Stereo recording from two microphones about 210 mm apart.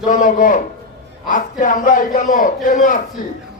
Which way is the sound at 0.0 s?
40° left (ahead or behind).